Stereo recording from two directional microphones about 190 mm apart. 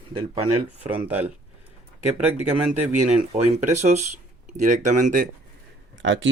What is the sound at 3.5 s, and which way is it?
Speech, 35° right (ahead or behind).